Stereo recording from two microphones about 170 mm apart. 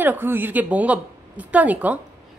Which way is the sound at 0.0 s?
10° right (ahead or behind).